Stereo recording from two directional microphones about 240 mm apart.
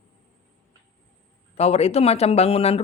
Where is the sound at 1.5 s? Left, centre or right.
Left.